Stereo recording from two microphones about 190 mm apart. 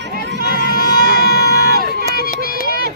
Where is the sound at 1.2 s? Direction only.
55° left (ahead or behind).